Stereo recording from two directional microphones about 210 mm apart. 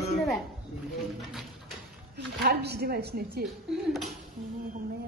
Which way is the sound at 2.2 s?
50° right (ahead or behind).